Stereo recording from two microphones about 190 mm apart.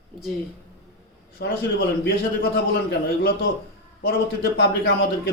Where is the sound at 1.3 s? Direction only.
55° left (ahead or behind).